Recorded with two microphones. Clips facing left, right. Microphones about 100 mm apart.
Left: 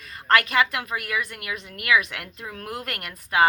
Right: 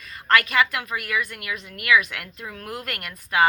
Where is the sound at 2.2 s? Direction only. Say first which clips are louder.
Even; 15° left (ahead or behind).